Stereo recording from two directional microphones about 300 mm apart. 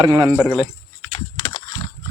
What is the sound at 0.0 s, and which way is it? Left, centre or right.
Speech, centre.